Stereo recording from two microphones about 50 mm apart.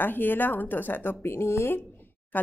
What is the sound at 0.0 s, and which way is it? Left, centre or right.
A woman's voice, left.